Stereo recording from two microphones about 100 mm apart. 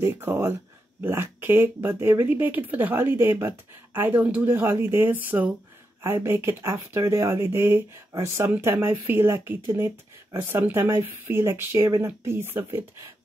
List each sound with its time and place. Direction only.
0.0 s speech: 20° right (ahead or behind)